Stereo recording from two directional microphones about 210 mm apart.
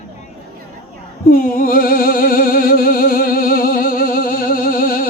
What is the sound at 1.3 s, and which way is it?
Music, 45° left (ahead or behind).